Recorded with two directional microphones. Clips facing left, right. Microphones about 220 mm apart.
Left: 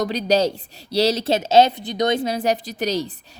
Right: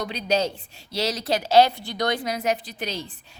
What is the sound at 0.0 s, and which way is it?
A woman's voice, 40° left (ahead or behind).